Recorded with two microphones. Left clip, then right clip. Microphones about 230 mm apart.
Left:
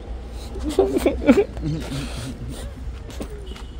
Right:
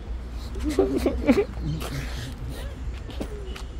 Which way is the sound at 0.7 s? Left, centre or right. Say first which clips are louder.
Left 5 dB; left.